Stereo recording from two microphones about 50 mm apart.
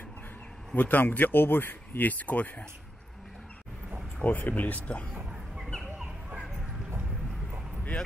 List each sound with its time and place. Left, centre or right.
0.7 s speech: left
4.2 s speech: left